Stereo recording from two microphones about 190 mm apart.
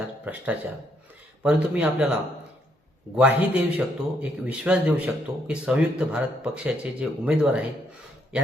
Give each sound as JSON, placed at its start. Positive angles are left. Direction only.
{"t": 0.3, "sound": "a man's voice", "side_deg": -10}
{"t": 3.2, "sound": "a man's voice", "side_deg": -10}